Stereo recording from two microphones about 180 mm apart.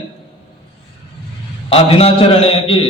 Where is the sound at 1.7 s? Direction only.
30° left (ahead or behind).